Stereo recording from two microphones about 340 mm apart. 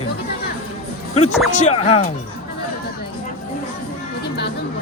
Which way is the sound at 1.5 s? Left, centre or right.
Centre.